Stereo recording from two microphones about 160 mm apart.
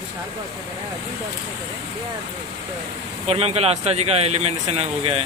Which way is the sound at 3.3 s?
40° right (ahead or behind).